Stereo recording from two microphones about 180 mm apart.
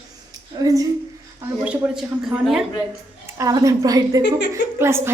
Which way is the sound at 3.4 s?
20° right (ahead or behind).